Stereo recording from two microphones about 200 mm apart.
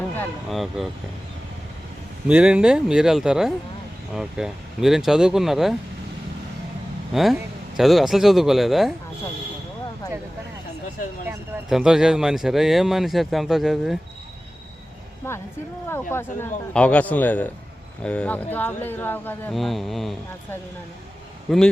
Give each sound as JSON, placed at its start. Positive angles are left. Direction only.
{"t": 0.2, "sound": "speech", "side_deg": 0}
{"t": 2.2, "sound": "speech", "side_deg": -5}
{"t": 7.1, "sound": "speech", "side_deg": 0}
{"t": 11.7, "sound": "speech", "side_deg": -5}
{"t": 15.2, "sound": "speech", "side_deg": 15}